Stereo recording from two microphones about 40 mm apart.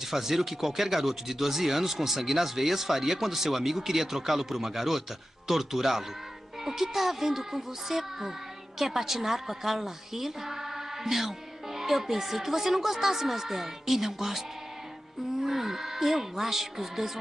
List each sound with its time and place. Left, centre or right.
0.0 s a woman's voice: centre
15.4 s a woman's voice: centre